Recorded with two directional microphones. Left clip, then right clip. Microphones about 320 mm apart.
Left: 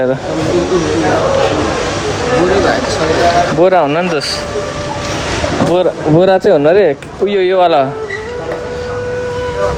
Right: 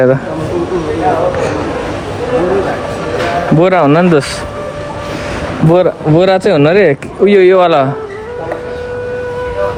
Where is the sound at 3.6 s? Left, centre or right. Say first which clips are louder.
Right 4 dB; centre.